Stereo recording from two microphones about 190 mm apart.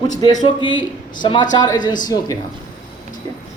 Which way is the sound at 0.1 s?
20° left (ahead or behind).